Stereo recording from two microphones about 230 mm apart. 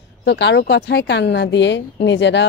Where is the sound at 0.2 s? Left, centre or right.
Left.